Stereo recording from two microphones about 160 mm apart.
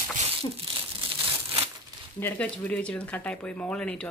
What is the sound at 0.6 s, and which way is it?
Crumpling, 35° right (ahead or behind).